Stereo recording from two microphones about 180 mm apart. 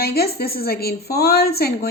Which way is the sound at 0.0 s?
60° left (ahead or behind).